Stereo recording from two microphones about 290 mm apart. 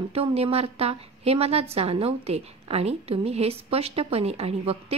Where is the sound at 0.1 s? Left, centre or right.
Right.